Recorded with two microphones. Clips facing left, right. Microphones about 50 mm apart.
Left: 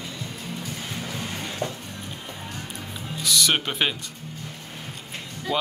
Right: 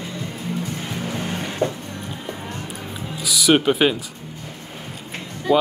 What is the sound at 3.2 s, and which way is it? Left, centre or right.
Music, centre.